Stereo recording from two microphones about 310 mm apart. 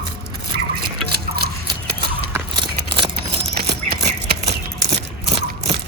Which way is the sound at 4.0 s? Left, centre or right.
Right.